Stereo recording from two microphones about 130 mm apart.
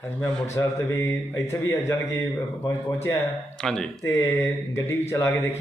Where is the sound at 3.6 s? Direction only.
5° left (ahead or behind).